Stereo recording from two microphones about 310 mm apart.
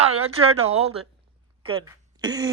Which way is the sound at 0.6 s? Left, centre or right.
Centre.